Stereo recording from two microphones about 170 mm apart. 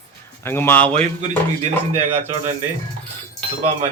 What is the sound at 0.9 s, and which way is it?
Speech, 45° right (ahead or behind).